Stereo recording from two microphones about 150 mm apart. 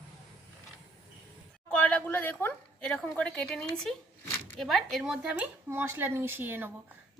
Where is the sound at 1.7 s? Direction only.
10° left (ahead or behind).